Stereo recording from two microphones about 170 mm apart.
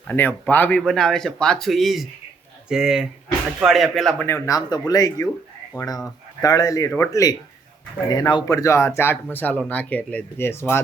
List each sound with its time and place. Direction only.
0.1 s speech: 10° left (ahead or behind)
4.3 s speech: 15° left (ahead or behind)
6.4 s speech: 20° left (ahead or behind)